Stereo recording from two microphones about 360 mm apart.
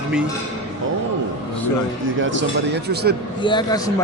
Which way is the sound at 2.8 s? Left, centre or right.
Right.